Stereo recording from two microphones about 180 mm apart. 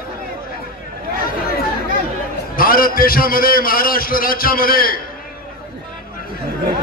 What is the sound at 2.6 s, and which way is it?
A man's voice, 55° left (ahead or behind).